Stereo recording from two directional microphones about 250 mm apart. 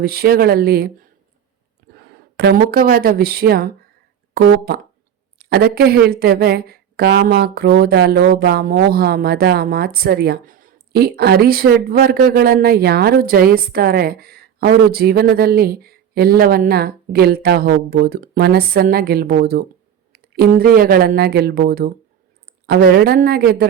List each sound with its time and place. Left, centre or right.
0.0 s a woman's voice: right
2.3 s a woman's voice: right